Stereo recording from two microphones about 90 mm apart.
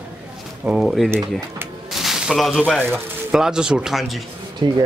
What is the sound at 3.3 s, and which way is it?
Speech, 5° right (ahead or behind).